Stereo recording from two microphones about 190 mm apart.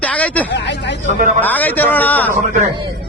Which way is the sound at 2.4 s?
40° right (ahead or behind).